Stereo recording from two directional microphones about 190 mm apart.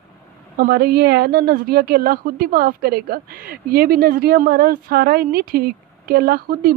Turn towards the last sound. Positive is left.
turn(degrees=-55)  # may be behind; listen again after turning